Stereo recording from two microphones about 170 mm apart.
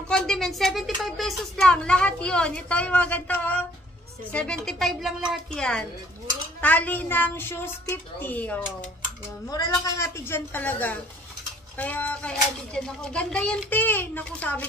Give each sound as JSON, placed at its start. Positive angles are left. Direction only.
{"t": 0.1, "sound": "a woman's voice", "side_deg": 5}
{"t": 9.5, "sound": "speech", "side_deg": 20}